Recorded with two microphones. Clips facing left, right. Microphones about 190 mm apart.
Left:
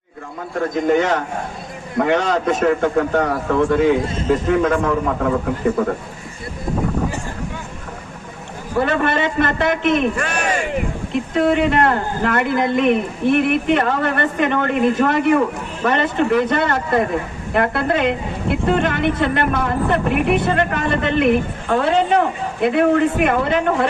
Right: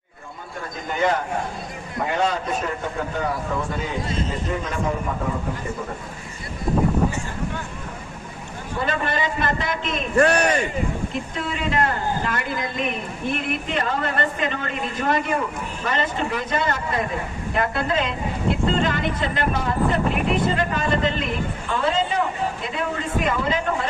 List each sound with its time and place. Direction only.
0.6 s a man's voice: 75° left (ahead or behind)
5.8 s a woman's voice: 65° left (ahead or behind)
8.8 s a man's voice: 65° left (ahead or behind)
10.2 s speech: 40° right (ahead or behind)
10.7 s a woman's voice: 70° left (ahead or behind)